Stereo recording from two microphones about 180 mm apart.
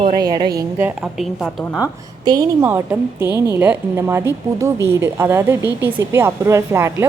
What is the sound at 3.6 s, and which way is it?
A woman's voice, 10° right (ahead or behind).